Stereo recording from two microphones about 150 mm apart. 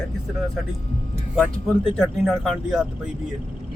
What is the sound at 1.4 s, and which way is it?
Speech, centre (ahead or behind).